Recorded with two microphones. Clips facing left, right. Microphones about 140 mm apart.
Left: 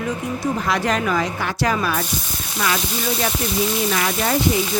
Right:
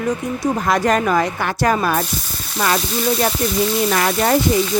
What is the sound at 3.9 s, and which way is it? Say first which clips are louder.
Speech: right 5 dB; 50° right (ahead or behind).